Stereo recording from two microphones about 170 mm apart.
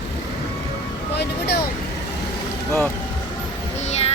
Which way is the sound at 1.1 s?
75° left (ahead or behind).